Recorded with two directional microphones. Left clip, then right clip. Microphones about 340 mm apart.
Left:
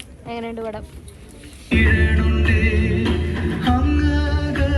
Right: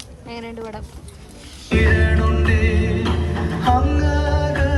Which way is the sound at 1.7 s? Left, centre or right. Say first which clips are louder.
Even; right.